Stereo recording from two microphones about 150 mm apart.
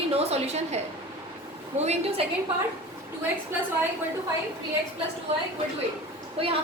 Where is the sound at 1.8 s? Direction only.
50° right (ahead or behind).